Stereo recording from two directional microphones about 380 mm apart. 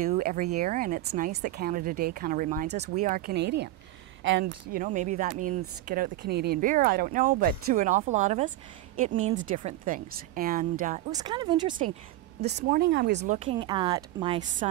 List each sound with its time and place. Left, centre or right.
0.0 s speech: right
12.4 s speech: right